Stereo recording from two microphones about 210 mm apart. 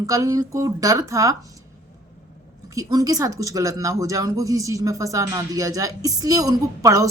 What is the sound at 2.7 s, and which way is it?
Speech, 15° right (ahead or behind).